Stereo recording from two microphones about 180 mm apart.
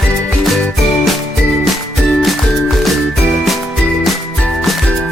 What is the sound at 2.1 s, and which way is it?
Music, centre (ahead or behind).